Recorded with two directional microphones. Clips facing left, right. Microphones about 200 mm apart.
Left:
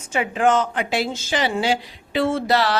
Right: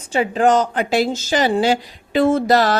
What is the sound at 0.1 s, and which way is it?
Speech, 35° right (ahead or behind).